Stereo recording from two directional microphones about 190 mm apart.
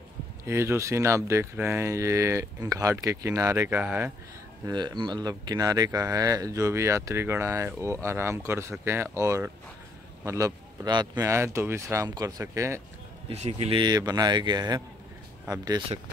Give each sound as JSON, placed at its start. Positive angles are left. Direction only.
{"t": 0.5, "sound": "speech", "side_deg": -15}
{"t": 4.6, "sound": "speech", "side_deg": -20}
{"t": 13.3, "sound": "speech", "side_deg": -35}